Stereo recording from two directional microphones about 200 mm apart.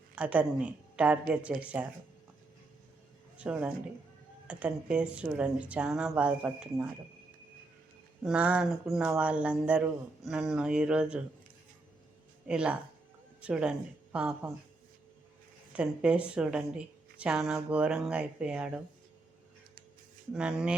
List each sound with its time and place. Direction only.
0.2 s speech: 5° right (ahead or behind)
3.3 s speech: 5° right (ahead or behind)
8.2 s a woman's voice: 5° right (ahead or behind)
12.5 s a woman's voice: 5° right (ahead or behind)
15.7 s a woman's voice: 5° right (ahead or behind)
20.3 s a woman's voice: centre (ahead or behind)